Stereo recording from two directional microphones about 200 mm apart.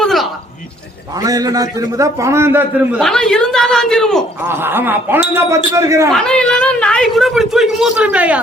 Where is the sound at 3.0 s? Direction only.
Centre (ahead or behind).